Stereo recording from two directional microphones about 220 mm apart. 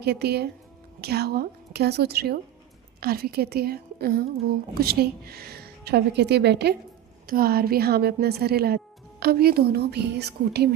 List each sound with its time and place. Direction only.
0.0 s a woman's voice: 50° right (ahead or behind)